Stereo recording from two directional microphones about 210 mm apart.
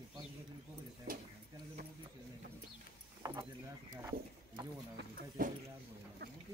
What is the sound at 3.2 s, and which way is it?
Speech, 20° right (ahead or behind).